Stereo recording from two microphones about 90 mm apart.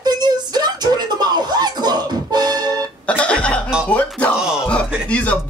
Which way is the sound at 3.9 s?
15° left (ahead or behind).